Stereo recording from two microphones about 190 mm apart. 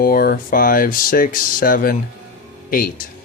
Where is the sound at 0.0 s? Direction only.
50° left (ahead or behind).